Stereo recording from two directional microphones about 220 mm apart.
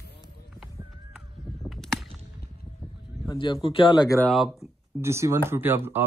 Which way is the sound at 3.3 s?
20° left (ahead or behind).